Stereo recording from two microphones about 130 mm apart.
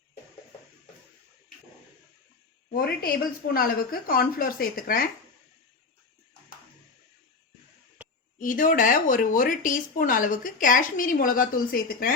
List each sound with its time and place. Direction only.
2.7 s speech: 90° left
8.0 s a sound: 10° right (ahead or behind)
8.4 s speech: 90° left